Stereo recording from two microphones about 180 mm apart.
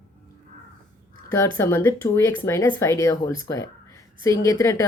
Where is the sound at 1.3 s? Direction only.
15° left (ahead or behind).